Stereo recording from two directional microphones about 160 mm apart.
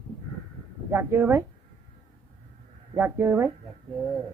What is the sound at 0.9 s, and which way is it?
Speech, 15° right (ahead or behind).